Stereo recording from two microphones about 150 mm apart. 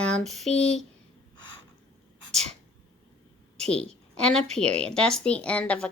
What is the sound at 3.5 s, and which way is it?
A woman's voice, 5° left (ahead or behind).